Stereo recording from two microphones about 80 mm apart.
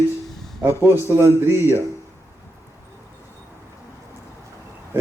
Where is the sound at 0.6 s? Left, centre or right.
Right.